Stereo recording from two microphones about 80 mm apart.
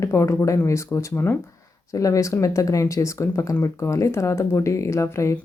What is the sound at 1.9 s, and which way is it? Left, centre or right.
Speech, left.